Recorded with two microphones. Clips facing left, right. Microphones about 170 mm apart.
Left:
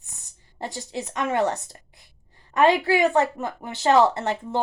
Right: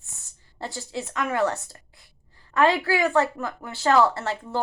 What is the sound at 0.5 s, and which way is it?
A woman's voice, 20° left (ahead or behind).